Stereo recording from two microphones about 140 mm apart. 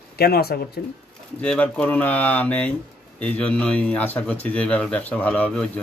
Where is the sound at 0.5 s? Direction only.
90° left.